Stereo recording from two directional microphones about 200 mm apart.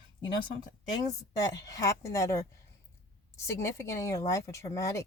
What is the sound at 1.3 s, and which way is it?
Speech, 15° left (ahead or behind).